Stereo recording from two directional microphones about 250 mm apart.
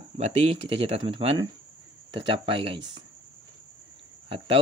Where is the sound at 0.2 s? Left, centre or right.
Right.